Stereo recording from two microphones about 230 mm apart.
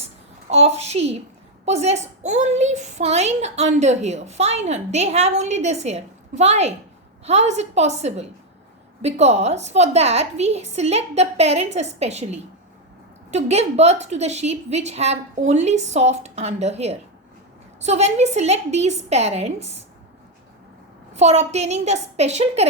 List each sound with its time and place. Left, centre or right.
0.5 s a woman's voice: right
21.1 s a woman's voice: right